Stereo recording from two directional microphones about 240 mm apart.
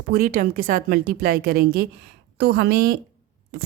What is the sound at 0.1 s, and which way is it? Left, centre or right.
Speech, right.